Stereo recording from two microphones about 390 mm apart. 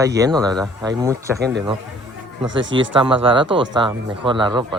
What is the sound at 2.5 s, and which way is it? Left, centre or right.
Speech, right.